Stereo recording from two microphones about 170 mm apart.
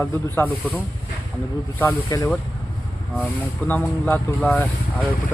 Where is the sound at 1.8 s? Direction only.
20° left (ahead or behind).